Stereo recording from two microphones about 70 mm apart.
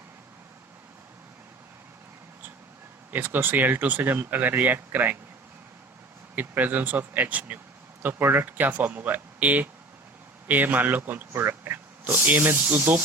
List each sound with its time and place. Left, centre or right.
3.1 s speech: right
6.3 s speech: right